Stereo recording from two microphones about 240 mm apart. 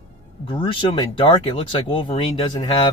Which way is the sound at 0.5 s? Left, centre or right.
Left.